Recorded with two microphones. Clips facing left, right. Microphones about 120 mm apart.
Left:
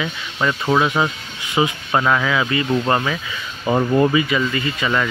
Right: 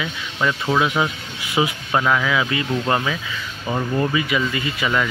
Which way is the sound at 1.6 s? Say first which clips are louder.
Left 2 dB; centre (ahead or behind).